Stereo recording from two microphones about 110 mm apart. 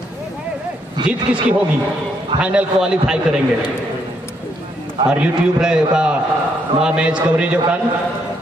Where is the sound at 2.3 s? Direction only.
10° right (ahead or behind).